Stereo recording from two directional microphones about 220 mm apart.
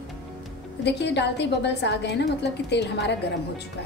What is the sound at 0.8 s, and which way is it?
A woman's voice, 50° left (ahead or behind).